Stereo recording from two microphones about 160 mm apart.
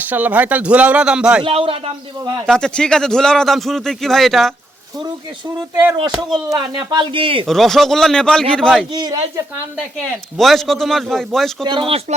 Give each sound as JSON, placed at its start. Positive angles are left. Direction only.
{"t": 0.0, "sound": "speech", "side_deg": -10}
{"t": 1.5, "sound": "speech", "side_deg": -35}
{"t": 2.5, "sound": "a man's voice", "side_deg": 5}
{"t": 6.5, "sound": "speech", "side_deg": -25}
{"t": 7.4, "sound": "a man's voice", "side_deg": 0}
{"t": 8.9, "sound": "speech", "side_deg": -25}
{"t": 10.3, "sound": "a man's voice", "side_deg": 0}
{"t": 11.6, "sound": "speech", "side_deg": -35}